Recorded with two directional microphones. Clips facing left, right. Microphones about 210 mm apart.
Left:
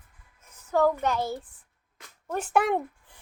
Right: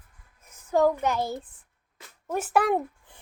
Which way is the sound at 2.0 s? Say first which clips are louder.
Right 2 dB; 5° right (ahead or behind).